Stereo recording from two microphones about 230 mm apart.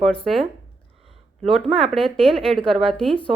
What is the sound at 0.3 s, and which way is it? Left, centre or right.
A woman's voice, centre.